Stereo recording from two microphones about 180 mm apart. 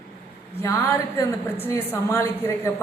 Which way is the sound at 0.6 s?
15° left (ahead or behind).